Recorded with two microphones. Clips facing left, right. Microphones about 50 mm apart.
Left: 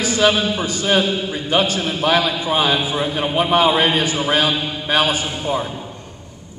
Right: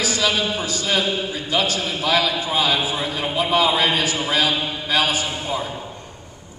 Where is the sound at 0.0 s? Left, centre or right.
Left.